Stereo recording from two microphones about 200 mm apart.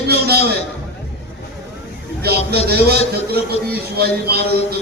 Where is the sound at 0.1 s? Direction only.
50° right (ahead or behind).